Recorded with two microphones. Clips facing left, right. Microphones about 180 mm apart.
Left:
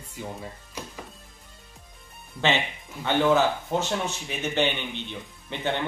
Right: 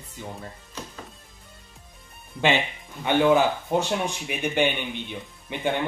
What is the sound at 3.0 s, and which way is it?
Speech, 15° right (ahead or behind).